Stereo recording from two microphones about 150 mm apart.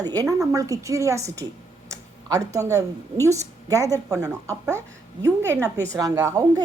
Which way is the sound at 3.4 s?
20° right (ahead or behind).